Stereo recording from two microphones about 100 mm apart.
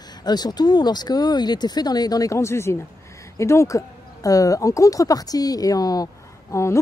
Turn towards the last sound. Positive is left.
turn(degrees=30)  # may be behind; listen again after turning